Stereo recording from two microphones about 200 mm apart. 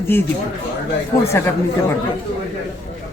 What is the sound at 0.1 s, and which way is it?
Speech, 10° left (ahead or behind).